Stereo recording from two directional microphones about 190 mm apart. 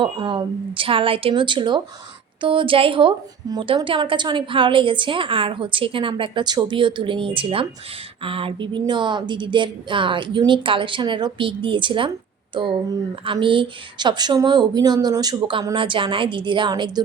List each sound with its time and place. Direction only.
0.0 s a woman's voice: 25° right (ahead or behind)